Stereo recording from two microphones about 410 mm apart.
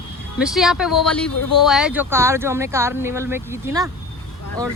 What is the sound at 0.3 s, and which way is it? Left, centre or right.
Speech, centre.